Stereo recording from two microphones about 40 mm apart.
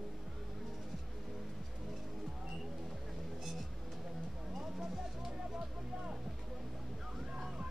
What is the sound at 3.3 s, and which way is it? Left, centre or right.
Music, centre.